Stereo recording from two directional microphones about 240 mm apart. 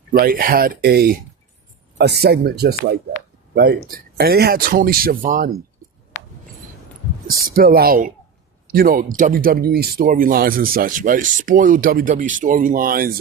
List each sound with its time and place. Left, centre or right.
0.1 s speech: right
7.5 s speech: right